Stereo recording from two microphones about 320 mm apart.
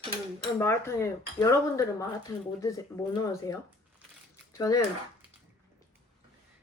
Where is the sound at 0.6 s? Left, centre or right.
Centre.